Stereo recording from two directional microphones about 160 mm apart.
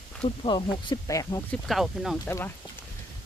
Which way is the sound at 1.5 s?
Centre (ahead or behind).